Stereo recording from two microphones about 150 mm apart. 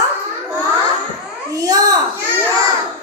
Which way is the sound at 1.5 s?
25° right (ahead or behind).